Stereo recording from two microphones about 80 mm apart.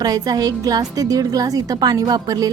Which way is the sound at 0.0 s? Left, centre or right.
Right.